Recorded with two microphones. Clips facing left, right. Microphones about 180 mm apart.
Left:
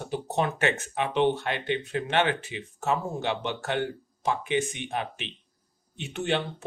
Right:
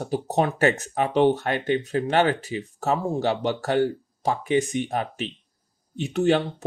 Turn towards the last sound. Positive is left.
turn(degrees=-40)  # may be behind; listen again after turning